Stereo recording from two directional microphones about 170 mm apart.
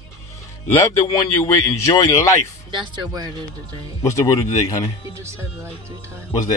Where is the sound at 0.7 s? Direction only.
15° left (ahead or behind).